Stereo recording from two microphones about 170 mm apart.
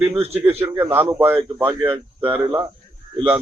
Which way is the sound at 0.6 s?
10° right (ahead or behind).